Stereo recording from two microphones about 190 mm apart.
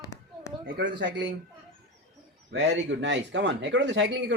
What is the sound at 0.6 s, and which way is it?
Speech, 70° right (ahead or behind).